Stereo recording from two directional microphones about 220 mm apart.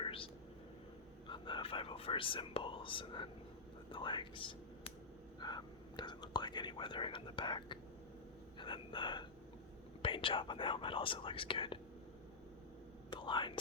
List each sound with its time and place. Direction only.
0.0 s whispering: 25° left (ahead or behind)
1.3 s whispering: 20° left (ahead or behind)
3.9 s speech: 20° left (ahead or behind)
8.5 s gasp: 20° left (ahead or behind)
10.0 s speech: 25° left (ahead or behind)
13.1 s whispering: 20° left (ahead or behind)